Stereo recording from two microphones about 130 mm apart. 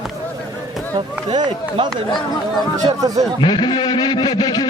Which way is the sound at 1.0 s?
45° right (ahead or behind).